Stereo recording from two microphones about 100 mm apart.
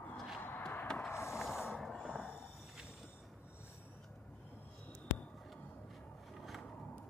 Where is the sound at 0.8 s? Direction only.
5° left (ahead or behind).